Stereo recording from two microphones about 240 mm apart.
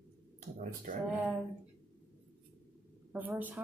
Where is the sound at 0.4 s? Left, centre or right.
Right.